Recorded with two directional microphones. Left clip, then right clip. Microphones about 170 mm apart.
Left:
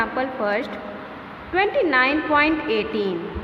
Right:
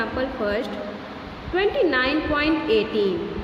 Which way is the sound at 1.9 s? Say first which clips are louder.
Left 4 dB; 20° left (ahead or behind).